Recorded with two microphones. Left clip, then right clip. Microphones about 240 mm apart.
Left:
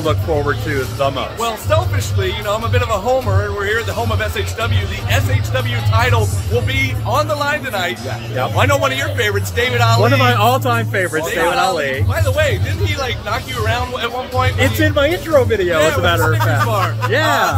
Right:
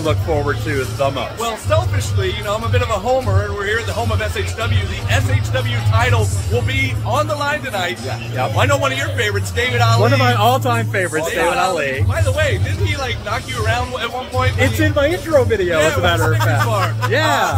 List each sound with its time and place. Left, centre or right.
0.0 s speech: centre
1.7 s a man's voice: centre
12.2 s a man's voice: centre
14.6 s speech: centre